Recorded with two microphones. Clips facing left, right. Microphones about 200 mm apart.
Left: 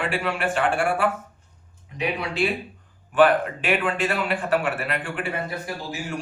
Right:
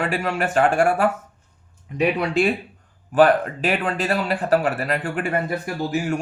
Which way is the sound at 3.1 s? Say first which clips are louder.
Right 2 dB; 40° right (ahead or behind).